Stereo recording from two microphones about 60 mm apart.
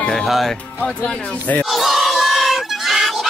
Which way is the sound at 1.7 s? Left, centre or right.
Centre.